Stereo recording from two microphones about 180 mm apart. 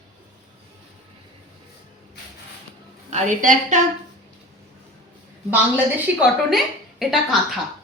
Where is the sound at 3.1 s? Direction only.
45° right (ahead or behind).